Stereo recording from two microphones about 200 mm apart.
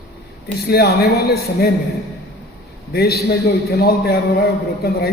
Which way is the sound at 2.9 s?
50° left (ahead or behind).